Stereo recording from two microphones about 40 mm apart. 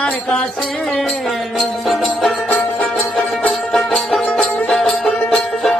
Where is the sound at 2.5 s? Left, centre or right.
Left.